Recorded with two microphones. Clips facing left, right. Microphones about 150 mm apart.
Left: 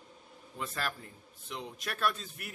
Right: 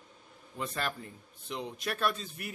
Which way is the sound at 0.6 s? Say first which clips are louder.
Right 2 dB; centre (ahead or behind).